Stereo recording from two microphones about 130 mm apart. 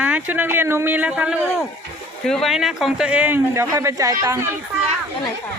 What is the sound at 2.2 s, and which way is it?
Speech, 5° left (ahead or behind).